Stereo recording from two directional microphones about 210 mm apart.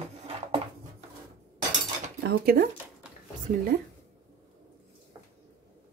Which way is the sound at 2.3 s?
45° right (ahead or behind).